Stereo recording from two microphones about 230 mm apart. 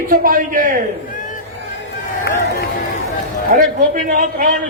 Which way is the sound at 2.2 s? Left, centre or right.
Left.